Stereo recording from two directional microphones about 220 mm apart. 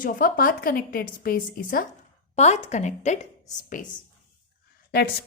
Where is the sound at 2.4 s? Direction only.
30° left (ahead or behind).